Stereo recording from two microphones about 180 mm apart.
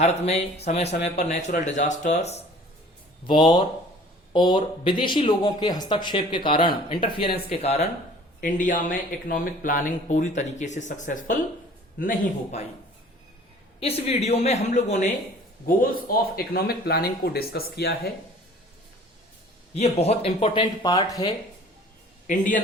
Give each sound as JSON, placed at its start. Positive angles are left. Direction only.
{"t": 0.0, "sound": "speech", "side_deg": 35}
{"t": 3.2, "sound": "speech", "side_deg": 25}
{"t": 8.4, "sound": "speech", "side_deg": 45}
{"t": 13.8, "sound": "speech", "side_deg": 35}
{"t": 15.6, "sound": "speech", "side_deg": 50}
{"t": 19.7, "sound": "speech", "side_deg": 35}
{"t": 22.3, "sound": "speech", "side_deg": 45}